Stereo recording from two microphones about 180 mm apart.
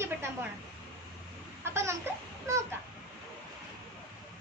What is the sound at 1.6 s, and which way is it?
Laughter, 15° right (ahead or behind).